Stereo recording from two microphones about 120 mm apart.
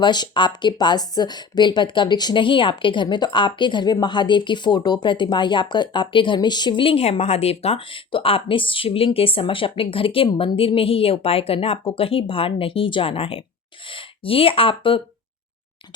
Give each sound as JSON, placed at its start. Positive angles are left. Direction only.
{"t": 0.0, "sound": "a woman's voice", "side_deg": 40}